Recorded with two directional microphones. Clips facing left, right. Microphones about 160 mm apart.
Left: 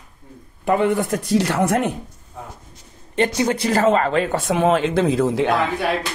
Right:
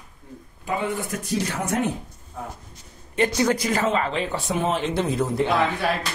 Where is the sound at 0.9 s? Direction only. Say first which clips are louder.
Left 7 dB; 65° left (ahead or behind); by 1.9 s 80° left.